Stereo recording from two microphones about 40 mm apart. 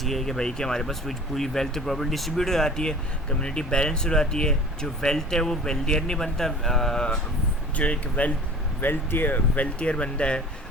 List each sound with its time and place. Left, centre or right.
0.0 s speech: centre
7.8 s speech: left
8.8 s speech: left
9.7 s speech: left